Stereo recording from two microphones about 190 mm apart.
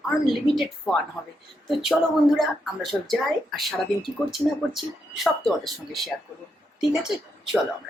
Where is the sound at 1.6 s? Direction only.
Centre (ahead or behind).